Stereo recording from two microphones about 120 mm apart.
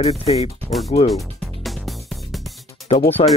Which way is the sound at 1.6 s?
Centre (ahead or behind).